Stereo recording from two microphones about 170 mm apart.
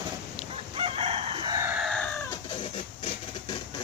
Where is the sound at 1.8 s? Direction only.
5° left (ahead or behind).